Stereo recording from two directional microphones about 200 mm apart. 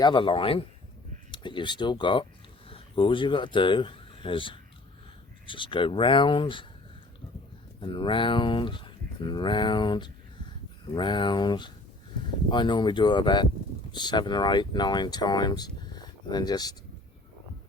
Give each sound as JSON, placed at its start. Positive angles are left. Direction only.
{"t": 0.0, "sound": "speech", "side_deg": 25}
{"t": 7.8, "sound": "speech", "side_deg": 25}